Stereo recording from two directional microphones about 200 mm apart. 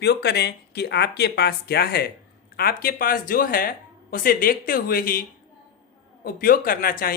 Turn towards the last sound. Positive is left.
turn(degrees=45)  # may be behind; listen again after turning